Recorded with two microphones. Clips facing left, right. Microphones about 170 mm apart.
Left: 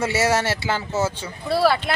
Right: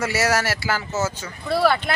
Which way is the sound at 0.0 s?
25° left (ahead or behind).